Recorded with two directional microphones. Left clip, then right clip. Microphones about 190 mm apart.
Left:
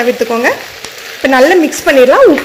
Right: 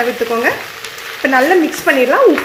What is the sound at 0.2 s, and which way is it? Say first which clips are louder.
Speech: left 3 dB; 20° left (ahead or behind).